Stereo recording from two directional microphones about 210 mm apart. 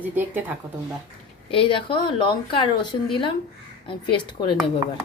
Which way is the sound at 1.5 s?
25° left (ahead or behind).